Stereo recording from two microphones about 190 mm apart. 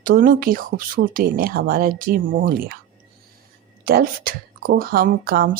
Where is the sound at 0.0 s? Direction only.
45° right (ahead or behind).